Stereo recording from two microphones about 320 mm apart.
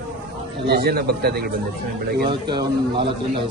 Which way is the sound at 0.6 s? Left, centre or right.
Right.